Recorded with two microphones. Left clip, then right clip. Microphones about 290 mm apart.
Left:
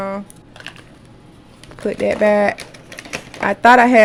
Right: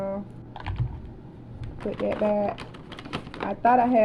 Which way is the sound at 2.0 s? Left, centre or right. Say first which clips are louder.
Left 11 dB; left.